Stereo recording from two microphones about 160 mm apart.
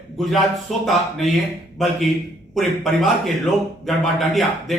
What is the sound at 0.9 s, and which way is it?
Speech, centre (ahead or behind).